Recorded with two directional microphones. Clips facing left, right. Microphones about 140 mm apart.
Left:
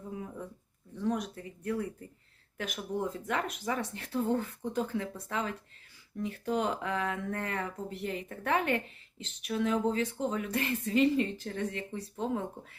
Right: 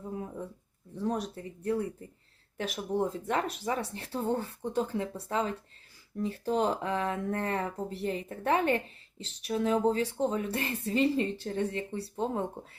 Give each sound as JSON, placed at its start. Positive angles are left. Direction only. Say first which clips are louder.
{"t": 0.9, "sound": "speech", "louder": "even", "side_deg": -35}